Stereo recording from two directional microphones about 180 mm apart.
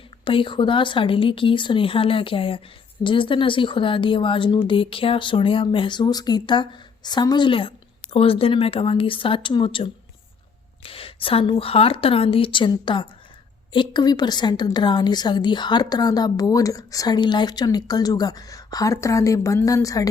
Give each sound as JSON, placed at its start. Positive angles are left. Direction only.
{"t": 0.3, "sound": "a woman's voice", "side_deg": 30}